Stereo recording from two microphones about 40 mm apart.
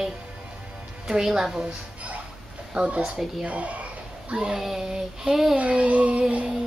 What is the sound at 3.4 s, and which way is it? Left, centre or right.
Speech, right.